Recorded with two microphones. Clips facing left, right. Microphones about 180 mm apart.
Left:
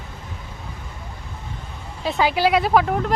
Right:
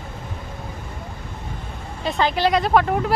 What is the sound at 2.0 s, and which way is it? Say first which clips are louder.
Speech: left 1 dB; 10° left (ahead or behind).